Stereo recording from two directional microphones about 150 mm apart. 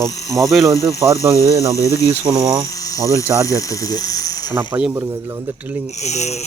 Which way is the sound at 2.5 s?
25° right (ahead or behind).